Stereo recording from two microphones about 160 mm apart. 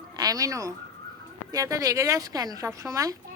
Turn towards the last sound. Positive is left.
turn(degrees=-20)  # may be behind; listen again after turning